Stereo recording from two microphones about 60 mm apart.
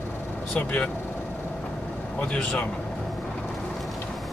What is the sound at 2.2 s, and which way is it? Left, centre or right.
Speech, centre.